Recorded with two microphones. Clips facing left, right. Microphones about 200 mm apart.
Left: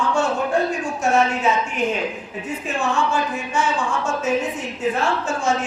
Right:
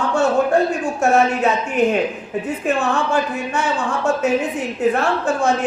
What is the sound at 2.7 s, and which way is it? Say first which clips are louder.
Speech: right 3 dB; 60° right (ahead or behind).